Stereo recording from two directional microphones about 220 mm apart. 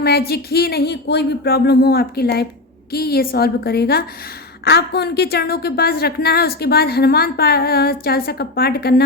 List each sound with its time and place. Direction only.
0.0 s a woman's voice: 45° left (ahead or behind)